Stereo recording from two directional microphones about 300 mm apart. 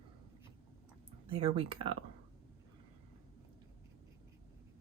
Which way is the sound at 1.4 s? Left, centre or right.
Centre.